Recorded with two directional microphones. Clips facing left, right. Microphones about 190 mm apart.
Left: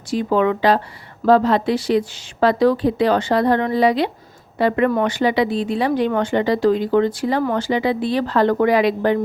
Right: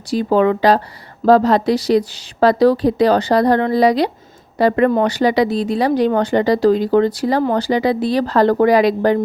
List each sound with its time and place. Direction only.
0.1 s speech: 35° right (ahead or behind)